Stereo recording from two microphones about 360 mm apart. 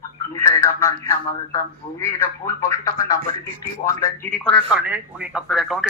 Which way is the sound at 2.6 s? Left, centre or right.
Centre.